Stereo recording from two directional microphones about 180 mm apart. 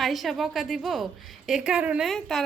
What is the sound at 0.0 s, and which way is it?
A woman's voice, centre (ahead or behind).